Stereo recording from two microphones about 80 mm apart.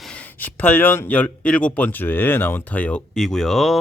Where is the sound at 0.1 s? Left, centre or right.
Centre.